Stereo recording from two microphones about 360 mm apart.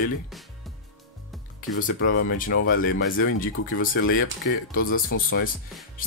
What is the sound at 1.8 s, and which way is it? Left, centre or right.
Speech, left.